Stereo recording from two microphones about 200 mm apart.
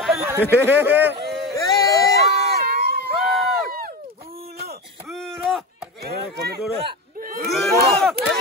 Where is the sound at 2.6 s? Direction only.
50° right (ahead or behind).